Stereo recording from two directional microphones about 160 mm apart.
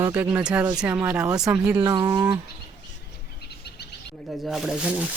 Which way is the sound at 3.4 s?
90° left.